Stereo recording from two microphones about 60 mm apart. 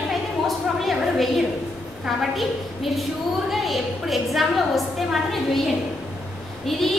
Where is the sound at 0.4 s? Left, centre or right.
Centre.